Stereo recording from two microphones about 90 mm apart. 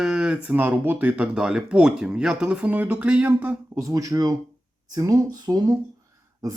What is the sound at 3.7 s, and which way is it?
Speech, 40° right (ahead or behind).